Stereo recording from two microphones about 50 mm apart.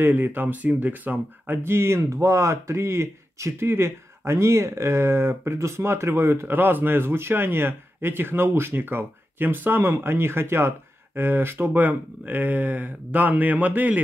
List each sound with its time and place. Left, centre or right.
0.0 s speech: right
2.0 s speech: right
6.4 s speech: right